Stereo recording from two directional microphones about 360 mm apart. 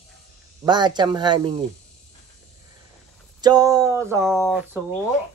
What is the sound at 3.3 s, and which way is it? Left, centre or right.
Speech, centre.